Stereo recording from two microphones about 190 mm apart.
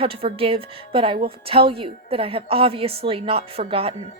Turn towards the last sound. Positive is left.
turn(degrees=-30)  # may be behind; listen again after turning